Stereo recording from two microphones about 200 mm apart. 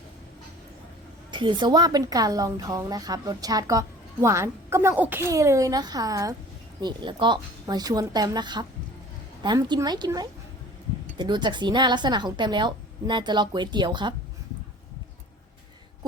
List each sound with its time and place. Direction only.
1.3 s a woman's voice: 25° right (ahead or behind)